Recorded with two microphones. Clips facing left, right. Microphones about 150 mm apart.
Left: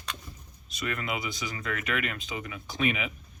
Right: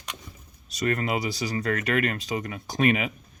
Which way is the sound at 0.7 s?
40° right (ahead or behind).